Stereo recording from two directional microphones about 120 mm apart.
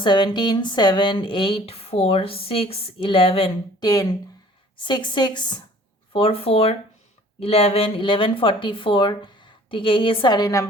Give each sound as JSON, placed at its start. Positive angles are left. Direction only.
{"t": 0.0, "sound": "speech", "side_deg": 40}
{"t": 3.8, "sound": "a woman's voice", "side_deg": 30}
{"t": 6.1, "sound": "speech", "side_deg": 50}